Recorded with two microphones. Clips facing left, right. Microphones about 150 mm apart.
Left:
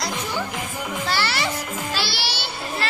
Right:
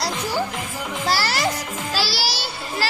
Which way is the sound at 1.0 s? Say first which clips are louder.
Right 4 dB; 40° right (ahead or behind).